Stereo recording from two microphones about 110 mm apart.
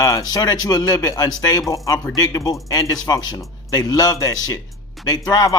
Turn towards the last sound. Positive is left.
turn(degrees=35)  # may be behind; listen again after turning